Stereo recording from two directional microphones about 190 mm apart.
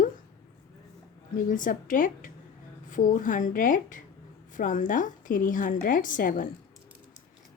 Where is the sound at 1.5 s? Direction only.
45° left (ahead or behind).